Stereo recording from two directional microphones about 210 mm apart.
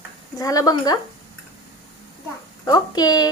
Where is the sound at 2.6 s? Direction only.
20° left (ahead or behind).